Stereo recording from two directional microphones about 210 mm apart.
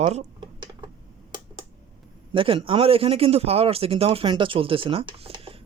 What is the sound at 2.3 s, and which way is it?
Speech, 25° right (ahead or behind).